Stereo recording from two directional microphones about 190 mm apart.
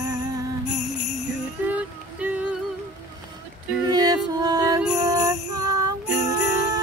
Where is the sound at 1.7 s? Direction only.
5° right (ahead or behind).